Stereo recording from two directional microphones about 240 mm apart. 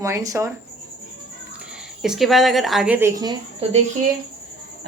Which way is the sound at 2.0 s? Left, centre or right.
Centre.